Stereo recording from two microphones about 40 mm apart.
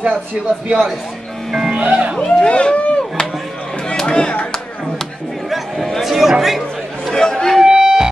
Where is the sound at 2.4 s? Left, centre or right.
Left.